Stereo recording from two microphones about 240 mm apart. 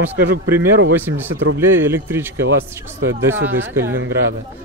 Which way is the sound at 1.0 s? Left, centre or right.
Centre.